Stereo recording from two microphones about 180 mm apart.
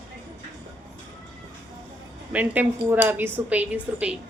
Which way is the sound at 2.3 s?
10° right (ahead or behind).